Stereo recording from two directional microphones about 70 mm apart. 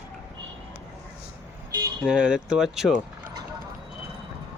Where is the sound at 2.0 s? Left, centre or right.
Centre.